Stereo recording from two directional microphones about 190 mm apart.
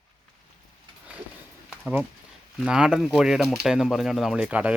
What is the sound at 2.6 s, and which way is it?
Speech, 5° right (ahead or behind).